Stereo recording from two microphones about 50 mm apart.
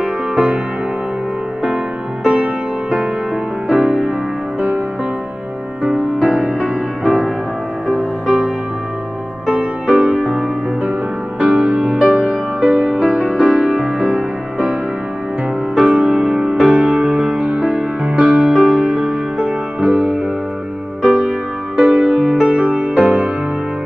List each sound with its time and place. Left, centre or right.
0.0 s music: centre
2.2 s music: centre
4.6 s music: right
6.1 s music: centre
10.0 s music: centre
15.7 s music: centre
21.2 s music: right